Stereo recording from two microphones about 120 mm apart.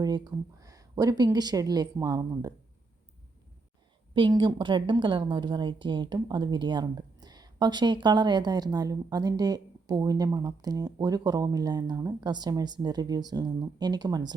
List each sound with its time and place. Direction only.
0.0 s a woman's voice: 35° right (ahead or behind)
4.1 s a woman's voice: 40° right (ahead or behind)